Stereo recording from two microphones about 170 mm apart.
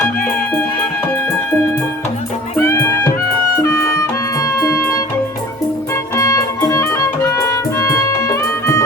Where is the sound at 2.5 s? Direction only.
15° left (ahead or behind).